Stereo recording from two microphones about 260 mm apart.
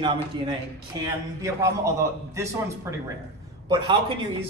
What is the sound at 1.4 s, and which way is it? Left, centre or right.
A man's voice, centre.